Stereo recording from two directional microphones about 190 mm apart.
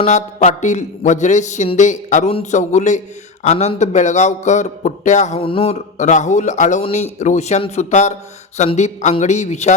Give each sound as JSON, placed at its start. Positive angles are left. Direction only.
{"t": 0.0, "sound": "a man's voice", "side_deg": 40}